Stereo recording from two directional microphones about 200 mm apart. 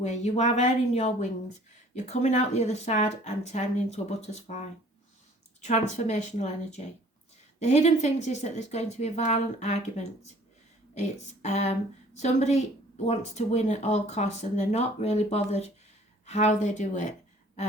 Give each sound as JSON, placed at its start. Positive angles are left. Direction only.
{"t": 0.0, "sound": "speech", "side_deg": 35}
{"t": 5.6, "sound": "speech", "side_deg": 35}
{"t": 11.4, "sound": "speech", "side_deg": 35}